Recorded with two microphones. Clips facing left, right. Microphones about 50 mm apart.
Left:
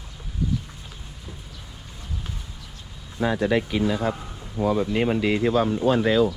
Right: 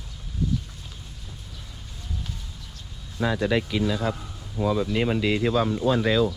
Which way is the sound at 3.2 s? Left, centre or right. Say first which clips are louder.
Left 2 dB; left.